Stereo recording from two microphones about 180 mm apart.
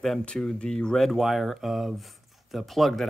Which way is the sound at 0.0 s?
5° left (ahead or behind).